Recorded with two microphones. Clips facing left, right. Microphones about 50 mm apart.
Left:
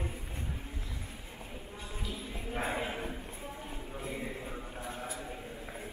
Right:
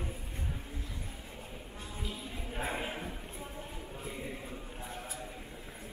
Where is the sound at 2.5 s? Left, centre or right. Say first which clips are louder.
Left 2 dB; left.